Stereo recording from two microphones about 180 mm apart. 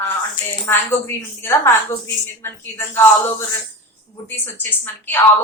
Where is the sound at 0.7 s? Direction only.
15° left (ahead or behind).